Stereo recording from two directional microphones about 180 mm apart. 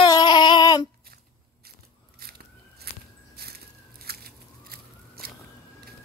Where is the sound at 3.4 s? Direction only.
60° right (ahead or behind).